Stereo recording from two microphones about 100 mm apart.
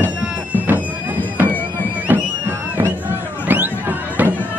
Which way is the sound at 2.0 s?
20° right (ahead or behind).